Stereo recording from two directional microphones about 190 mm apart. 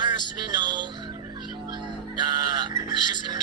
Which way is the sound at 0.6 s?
25° right (ahead or behind).